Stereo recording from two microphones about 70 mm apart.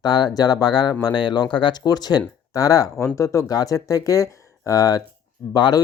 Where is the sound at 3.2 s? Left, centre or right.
Left.